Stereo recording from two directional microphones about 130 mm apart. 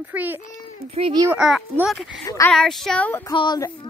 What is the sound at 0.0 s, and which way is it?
Speech, 15° right (ahead or behind).